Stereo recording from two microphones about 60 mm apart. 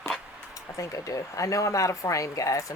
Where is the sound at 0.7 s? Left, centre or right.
Left.